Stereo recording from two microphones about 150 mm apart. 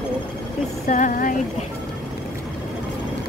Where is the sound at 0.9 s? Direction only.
60° left (ahead or behind).